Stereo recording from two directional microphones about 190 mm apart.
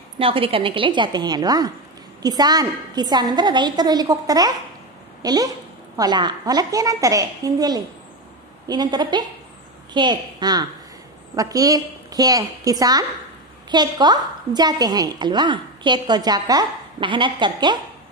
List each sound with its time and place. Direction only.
0.2 s a woman's voice: 30° right (ahead or behind)